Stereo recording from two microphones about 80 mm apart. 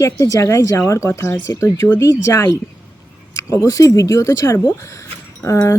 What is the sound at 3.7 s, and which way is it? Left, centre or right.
Speech, left.